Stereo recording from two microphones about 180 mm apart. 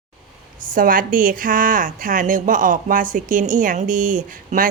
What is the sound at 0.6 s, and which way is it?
A woman's voice, 50° right (ahead or behind).